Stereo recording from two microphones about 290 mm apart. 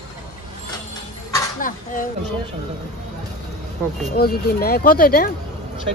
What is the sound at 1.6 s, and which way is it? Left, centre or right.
Speech, left.